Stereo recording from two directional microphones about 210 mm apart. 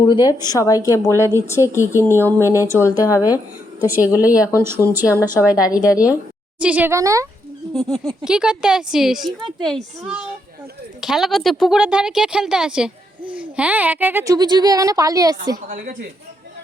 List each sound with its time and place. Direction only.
0.1 s speech: 20° left (ahead or behind)
2.4 s speech: 10° right (ahead or behind)
3.8 s a woman's voice: 10° right (ahead or behind)
4.0 s speech: 15° left (ahead or behind)
4.3 s speech: 10° right (ahead or behind)
7.7 s a woman's voice: centre (ahead or behind); by 15.4 s 15° right (ahead or behind)
15.7 s speech: 40° right (ahead or behind)